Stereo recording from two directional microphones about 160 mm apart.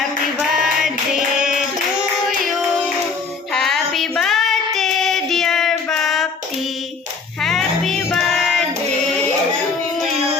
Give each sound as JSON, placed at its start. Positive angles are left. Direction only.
{"t": 0.5, "sound": "hands", "side_deg": -5}
{"t": 2.5, "sound": "music", "side_deg": 0}
{"t": 3.5, "sound": "child singing", "side_deg": 0}
{"t": 7.4, "sound": "music", "side_deg": 0}